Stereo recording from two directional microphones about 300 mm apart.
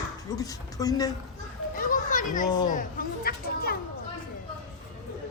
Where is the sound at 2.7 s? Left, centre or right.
Left.